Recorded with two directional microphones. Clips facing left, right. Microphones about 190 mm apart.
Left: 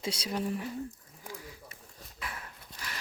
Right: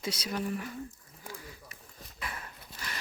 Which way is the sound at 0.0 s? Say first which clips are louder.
Left 1 dB; 30° left (ahead or behind).